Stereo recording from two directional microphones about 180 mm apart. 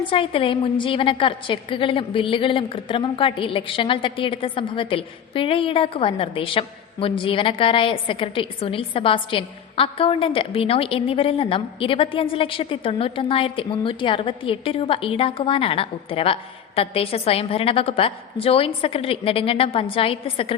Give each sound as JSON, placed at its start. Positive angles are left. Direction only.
{"t": 0.0, "sound": "a woman's voice", "side_deg": 30}